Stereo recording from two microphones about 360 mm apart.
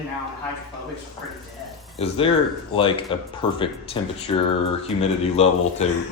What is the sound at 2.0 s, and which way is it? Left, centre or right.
Speech, centre.